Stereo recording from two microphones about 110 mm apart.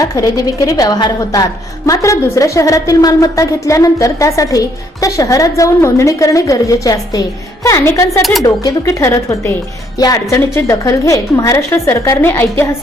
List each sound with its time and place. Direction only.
0.0 s a woman's voice: 30° left (ahead or behind)
8.2 s speech: centre (ahead or behind)
8.4 s a woman's voice: 30° left (ahead or behind)